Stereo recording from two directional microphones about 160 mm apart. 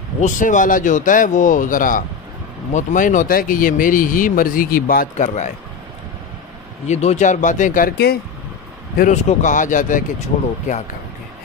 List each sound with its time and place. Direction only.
0.2 s speech: 55° left (ahead or behind)
6.9 s speech: 45° left (ahead or behind); by 8.2 s 70° left (ahead or behind)
8.9 s speech: 55° left (ahead or behind)